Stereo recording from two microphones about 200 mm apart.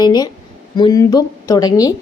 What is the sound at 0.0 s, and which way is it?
A woman's voice, 20° left (ahead or behind).